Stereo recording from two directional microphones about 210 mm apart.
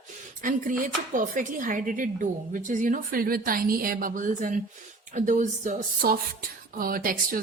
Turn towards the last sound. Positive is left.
turn(degrees=-40)  # may be behind; listen again after turning